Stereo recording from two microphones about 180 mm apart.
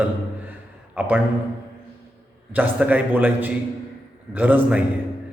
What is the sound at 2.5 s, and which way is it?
A man's voice, 10° right (ahead or behind).